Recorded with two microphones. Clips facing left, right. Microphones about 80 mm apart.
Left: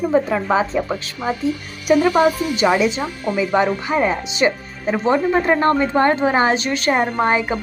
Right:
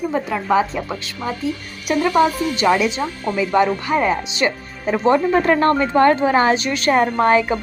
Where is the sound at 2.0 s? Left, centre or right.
Centre.